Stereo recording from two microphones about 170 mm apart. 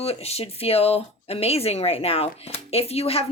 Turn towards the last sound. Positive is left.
turn(degrees=35)  # may be behind; listen again after turning